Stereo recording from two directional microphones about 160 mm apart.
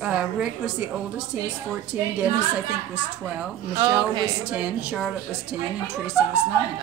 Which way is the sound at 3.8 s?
30° right (ahead or behind).